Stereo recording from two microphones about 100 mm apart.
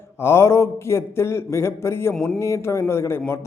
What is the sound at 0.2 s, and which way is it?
A man's voice, 25° left (ahead or behind).